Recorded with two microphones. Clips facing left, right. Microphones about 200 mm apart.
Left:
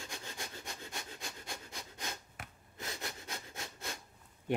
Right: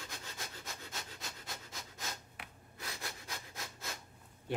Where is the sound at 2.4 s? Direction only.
50° left (ahead or behind).